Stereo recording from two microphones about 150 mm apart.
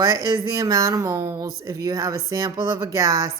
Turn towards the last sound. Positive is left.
turn(degrees=-25)  # may be behind; listen again after turning